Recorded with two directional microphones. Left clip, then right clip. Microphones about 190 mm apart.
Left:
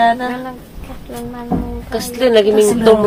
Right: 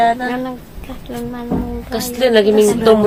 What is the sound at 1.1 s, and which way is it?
Speech, 25° right (ahead or behind).